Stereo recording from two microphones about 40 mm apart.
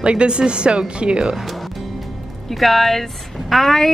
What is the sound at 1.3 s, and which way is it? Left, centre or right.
Speech, centre.